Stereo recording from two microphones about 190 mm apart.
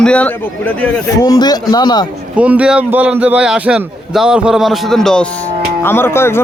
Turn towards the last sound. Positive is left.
turn(degrees=15)  # may be behind; listen again after turning